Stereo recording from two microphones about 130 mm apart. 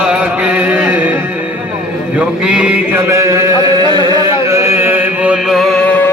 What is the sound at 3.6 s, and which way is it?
Chant, 35° right (ahead or behind).